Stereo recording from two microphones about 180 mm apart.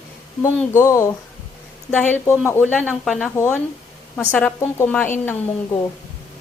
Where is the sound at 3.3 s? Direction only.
15° left (ahead or behind).